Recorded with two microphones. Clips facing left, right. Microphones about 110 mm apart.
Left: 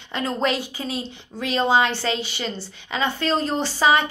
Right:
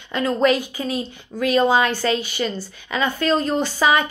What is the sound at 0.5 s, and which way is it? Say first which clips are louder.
Speech: right 4 dB; 45° right (ahead or behind).